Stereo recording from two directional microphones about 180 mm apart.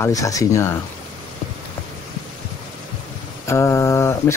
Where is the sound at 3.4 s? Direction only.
15° left (ahead or behind).